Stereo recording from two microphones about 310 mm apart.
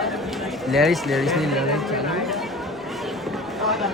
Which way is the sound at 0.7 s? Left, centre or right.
Centre.